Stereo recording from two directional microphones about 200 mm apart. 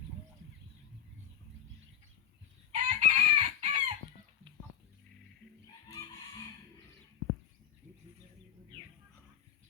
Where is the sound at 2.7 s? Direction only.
35° right (ahead or behind).